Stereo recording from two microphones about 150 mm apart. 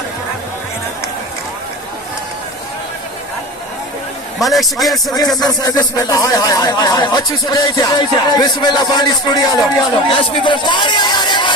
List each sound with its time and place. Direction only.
4.4 s a man's voice: centre (ahead or behind)
5.4 s speech: 25° left (ahead or behind)